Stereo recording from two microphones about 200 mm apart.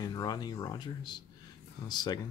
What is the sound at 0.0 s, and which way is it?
Speech, 20° left (ahead or behind).